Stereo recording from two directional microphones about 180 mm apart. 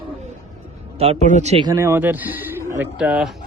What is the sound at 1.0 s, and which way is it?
Speech, 40° right (ahead or behind).